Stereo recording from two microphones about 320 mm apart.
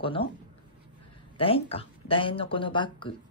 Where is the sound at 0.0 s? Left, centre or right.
Centre.